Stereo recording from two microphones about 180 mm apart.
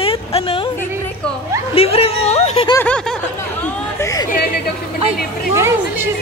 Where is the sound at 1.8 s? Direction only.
35° left (ahead or behind).